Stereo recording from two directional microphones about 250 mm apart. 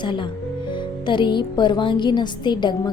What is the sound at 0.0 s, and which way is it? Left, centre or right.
A woman's voice, centre.